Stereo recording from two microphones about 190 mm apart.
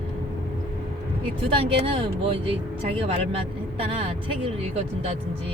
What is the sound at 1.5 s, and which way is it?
Speech, 30° right (ahead or behind).